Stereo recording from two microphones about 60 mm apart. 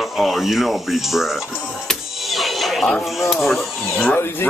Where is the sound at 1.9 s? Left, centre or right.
Centre.